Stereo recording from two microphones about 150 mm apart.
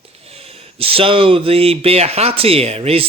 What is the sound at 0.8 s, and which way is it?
Speech, 40° right (ahead or behind).